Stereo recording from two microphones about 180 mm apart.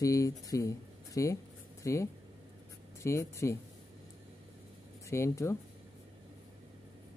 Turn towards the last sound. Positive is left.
turn(degrees=15)  # may be behind; listen again after turning